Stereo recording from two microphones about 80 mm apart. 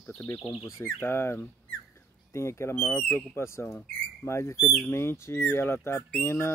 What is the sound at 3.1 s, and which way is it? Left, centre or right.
Speech, left.